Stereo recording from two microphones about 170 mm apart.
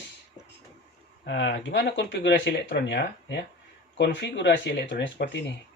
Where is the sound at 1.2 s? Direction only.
90° left.